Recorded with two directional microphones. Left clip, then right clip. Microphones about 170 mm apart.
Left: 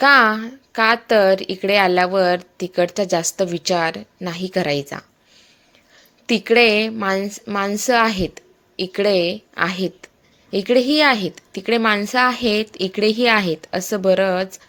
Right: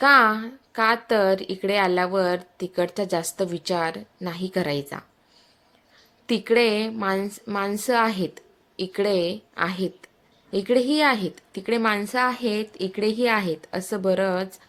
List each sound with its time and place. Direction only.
0.0 s speech: 15° left (ahead or behind)
6.2 s speech: 15° left (ahead or behind)